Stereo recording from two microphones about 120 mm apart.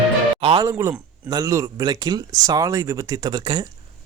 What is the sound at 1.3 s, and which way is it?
Speech, 30° right (ahead or behind).